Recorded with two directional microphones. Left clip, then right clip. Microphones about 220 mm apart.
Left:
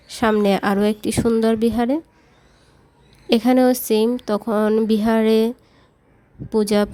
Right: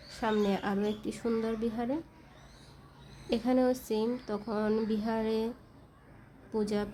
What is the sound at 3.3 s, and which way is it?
Speech, 45° left (ahead or behind).